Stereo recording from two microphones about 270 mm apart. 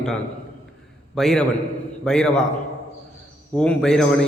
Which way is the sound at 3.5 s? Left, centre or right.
Centre.